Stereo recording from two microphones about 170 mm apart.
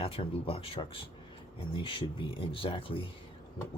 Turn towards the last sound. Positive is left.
turn(degrees=30)  # may be behind; listen again after turning